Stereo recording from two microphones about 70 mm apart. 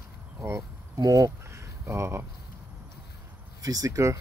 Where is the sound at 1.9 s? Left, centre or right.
Right.